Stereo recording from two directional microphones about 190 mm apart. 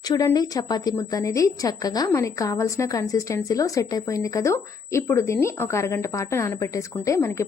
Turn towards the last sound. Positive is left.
turn(degrees=15)  # may be behind; listen again after turning